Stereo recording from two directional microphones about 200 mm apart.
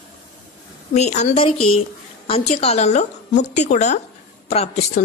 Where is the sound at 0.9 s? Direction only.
35° left (ahead or behind).